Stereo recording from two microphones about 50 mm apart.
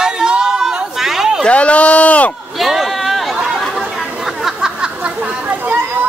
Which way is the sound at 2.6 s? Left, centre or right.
Centre.